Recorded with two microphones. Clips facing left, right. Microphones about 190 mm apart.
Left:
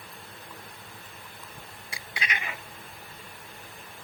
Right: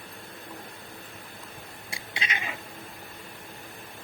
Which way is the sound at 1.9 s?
25° right (ahead or behind).